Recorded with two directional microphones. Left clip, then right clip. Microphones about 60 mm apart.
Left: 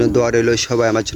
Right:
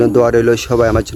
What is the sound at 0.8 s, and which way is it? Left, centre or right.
Speech, right.